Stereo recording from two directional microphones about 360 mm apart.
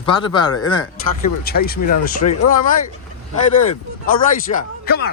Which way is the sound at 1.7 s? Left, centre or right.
Left.